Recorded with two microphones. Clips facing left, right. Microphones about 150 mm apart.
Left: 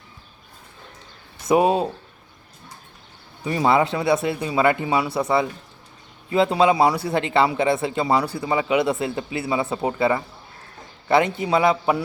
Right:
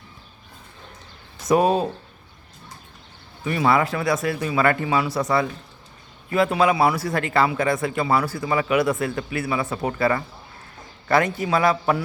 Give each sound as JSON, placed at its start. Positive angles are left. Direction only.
{"t": 1.5, "sound": "a man's voice", "side_deg": 20}
{"t": 3.4, "sound": "a man's voice", "side_deg": 20}
{"t": 5.0, "sound": "a man's voice", "side_deg": 30}